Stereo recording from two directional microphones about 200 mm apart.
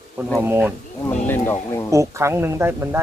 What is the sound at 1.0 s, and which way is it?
Speech, 10° left (ahead or behind).